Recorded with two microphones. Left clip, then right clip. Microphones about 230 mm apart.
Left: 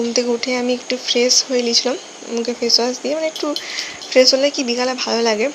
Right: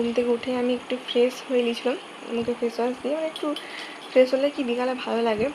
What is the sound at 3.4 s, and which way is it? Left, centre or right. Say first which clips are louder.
Speech: left 6 dB; left.